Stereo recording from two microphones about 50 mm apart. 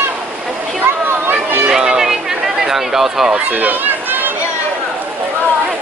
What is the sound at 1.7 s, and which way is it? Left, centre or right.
Speech, centre.